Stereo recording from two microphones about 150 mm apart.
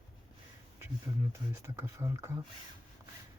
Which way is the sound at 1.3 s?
15° right (ahead or behind).